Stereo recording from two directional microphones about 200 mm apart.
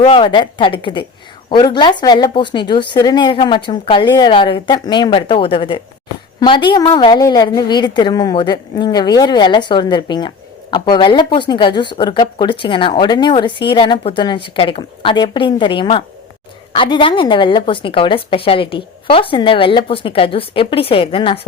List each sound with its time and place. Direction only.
0.0 s a woman's voice: 25° left (ahead or behind)